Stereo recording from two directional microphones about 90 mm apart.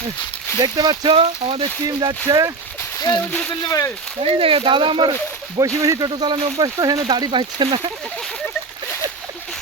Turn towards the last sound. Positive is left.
turn(degrees=-60)  # may be behind; listen again after turning